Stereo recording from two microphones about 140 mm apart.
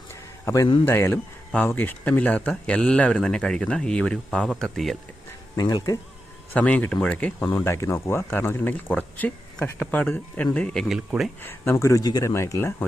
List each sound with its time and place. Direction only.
0.1 s a sound: 20° left (ahead or behind)
0.9 s speech: 15° left (ahead or behind)
5.5 s speech: 25° left (ahead or behind)
6.5 s speech: 10° left (ahead or behind)
10.8 s speech: 5° right (ahead or behind)
11.4 s speech: 15° left (ahead or behind)